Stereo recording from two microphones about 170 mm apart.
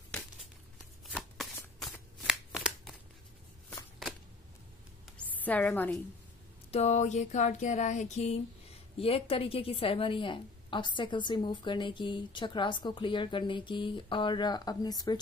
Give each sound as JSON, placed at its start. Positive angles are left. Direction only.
{"t": 1.0, "sound": "shuffling cards", "side_deg": 0}
{"t": 5.4, "sound": "a woman's voice", "side_deg": 10}
{"t": 6.7, "sound": "a sound", "side_deg": 40}
{"t": 8.9, "sound": "a woman's voice", "side_deg": 35}